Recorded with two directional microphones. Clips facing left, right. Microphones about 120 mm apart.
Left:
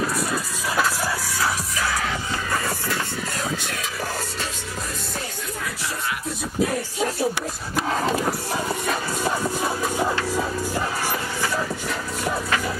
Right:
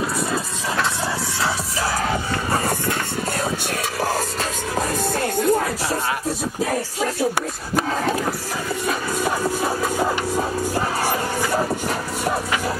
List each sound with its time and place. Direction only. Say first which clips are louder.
1.4 s music: right 1 dB; 30° right (ahead or behind)
4.0 s music: right 7 dB; 40° right (ahead or behind)
4.7 s music: right 12 dB; 50° right (ahead or behind)
10.3 s music: right 3 dB; 35° right (ahead or behind)